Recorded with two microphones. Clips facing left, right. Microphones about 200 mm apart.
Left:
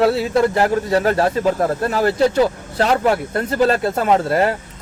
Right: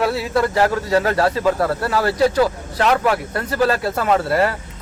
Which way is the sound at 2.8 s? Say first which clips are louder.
Left 1 dB; 30° left (ahead or behind).